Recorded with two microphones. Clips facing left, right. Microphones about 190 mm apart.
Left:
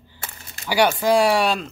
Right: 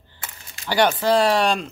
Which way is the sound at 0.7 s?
10° left (ahead or behind).